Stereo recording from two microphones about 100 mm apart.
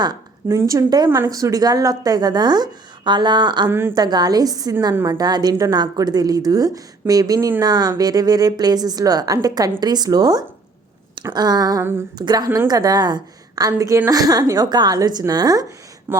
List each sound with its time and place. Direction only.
0.4 s a woman's voice: 30° right (ahead or behind); by 3.7 s 45° right (ahead or behind)
3.7 s a woman's voice: 25° right (ahead or behind)
3.9 s a woman's voice: 45° right (ahead or behind)
11.8 s a woman's voice: 25° right (ahead or behind)
12.1 s a woman's voice: 45° right (ahead or behind)
16.1 s speech: 25° right (ahead or behind)